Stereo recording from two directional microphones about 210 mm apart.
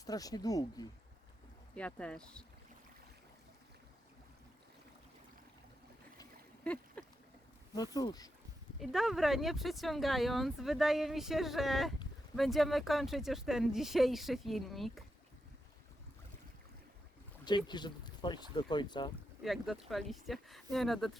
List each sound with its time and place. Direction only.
0.0 s speech: 15° left (ahead or behind)
1.7 s speech: 5° left (ahead or behind)
6.7 s speech: 5° left (ahead or behind)
7.8 s speech: 20° left (ahead or behind)
8.8 s speech: centre (ahead or behind)
17.7 s speech: 20° left (ahead or behind)
19.4 s speech: centre (ahead or behind)